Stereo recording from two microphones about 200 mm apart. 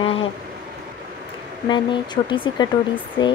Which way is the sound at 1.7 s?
25° left (ahead or behind).